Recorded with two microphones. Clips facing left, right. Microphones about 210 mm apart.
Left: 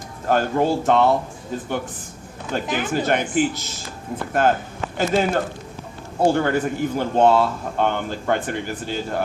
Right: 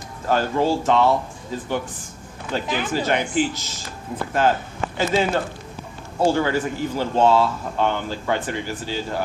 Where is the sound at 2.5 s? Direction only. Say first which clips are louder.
Left 1 dB; 50° left (ahead or behind).